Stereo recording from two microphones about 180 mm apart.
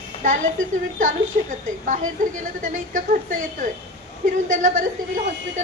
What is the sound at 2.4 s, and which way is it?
Child singing, 50° right (ahead or behind).